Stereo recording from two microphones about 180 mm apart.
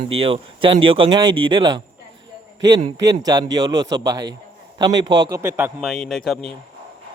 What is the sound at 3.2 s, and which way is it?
A man's voice, 20° right (ahead or behind).